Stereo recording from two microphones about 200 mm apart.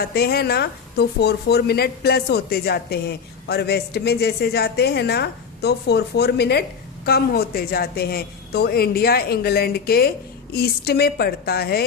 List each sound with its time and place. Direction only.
0.0 s speech: 50° left (ahead or behind)